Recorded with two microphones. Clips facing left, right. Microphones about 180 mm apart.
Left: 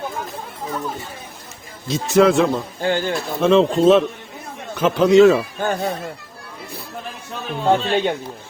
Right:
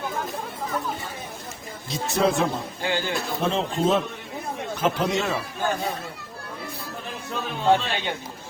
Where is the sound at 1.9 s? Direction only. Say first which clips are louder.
Left 8 dB; 90° left.